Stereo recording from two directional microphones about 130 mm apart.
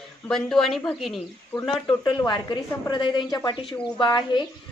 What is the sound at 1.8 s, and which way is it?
Speech, 35° left (ahead or behind).